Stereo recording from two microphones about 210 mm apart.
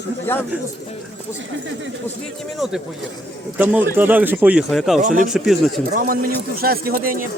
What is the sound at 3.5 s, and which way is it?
Speech, 10° right (ahead or behind).